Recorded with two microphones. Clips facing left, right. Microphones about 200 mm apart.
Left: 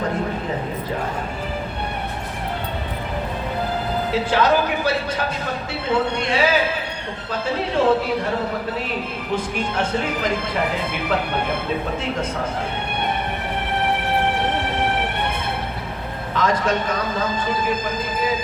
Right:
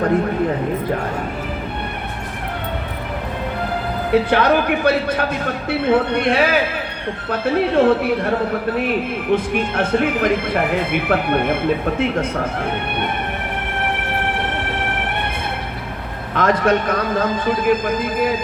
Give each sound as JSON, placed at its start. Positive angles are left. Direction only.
{"t": 4.1, "sound": "speech", "side_deg": -60}
{"t": 9.3, "sound": "speech", "side_deg": -55}
{"t": 16.3, "sound": "speech", "side_deg": -55}